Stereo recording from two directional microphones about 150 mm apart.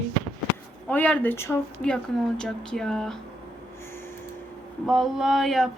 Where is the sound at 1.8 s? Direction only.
5° left (ahead or behind).